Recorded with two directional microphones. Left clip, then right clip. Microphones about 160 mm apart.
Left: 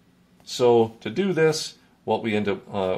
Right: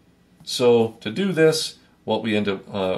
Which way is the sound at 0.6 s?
20° left (ahead or behind).